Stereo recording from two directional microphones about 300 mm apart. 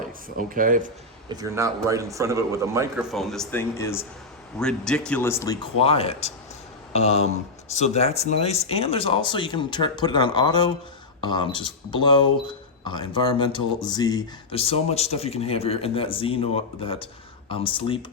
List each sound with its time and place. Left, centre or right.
0.3 s speech: right
1.3 s a man's voice: centre
3.2 s speech: centre